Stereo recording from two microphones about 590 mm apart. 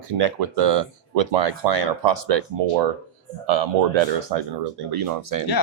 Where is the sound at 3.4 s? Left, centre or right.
Right.